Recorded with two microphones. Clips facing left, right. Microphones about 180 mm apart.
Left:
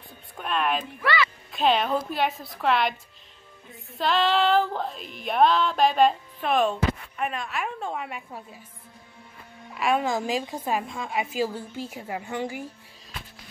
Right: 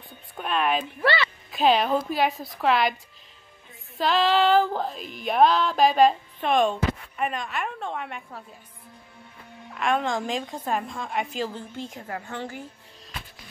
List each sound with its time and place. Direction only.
0.4 s female singing: centre (ahead or behind)
1.0 s music: 30° right (ahead or behind)
1.5 s female singing: centre (ahead or behind)
4.0 s female singing: centre (ahead or behind)
9.8 s female singing: 5° left (ahead or behind)